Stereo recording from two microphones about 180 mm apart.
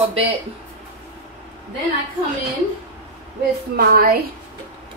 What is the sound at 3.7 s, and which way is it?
Speech, 55° right (ahead or behind).